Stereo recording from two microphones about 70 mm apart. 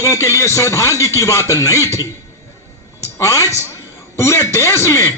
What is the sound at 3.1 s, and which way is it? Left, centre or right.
A man's voice, left.